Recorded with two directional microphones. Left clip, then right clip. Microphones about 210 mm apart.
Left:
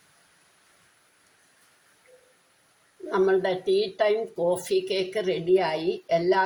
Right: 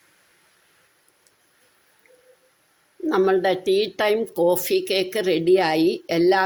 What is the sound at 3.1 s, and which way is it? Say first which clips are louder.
Speech: right 4 dB; 45° right (ahead or behind).